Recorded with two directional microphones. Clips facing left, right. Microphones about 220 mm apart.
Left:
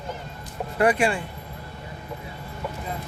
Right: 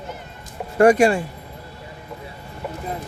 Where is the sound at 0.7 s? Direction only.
45° right (ahead or behind).